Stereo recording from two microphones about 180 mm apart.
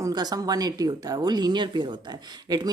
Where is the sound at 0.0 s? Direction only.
20° right (ahead or behind).